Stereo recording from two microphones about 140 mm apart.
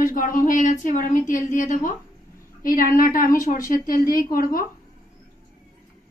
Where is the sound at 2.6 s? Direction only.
90° left.